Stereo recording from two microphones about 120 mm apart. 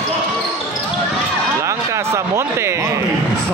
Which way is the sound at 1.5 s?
25° right (ahead or behind).